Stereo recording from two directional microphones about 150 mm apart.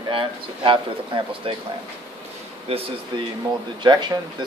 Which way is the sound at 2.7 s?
40° right (ahead or behind).